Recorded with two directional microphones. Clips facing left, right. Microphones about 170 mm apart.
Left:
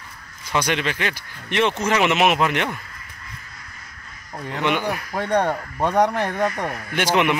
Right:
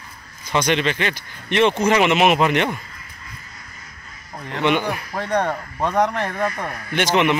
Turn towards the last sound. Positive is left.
turn(degrees=5)  # may be behind; listen again after turning